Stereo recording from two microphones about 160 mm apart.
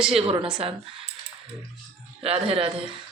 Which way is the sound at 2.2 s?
40° right (ahead or behind).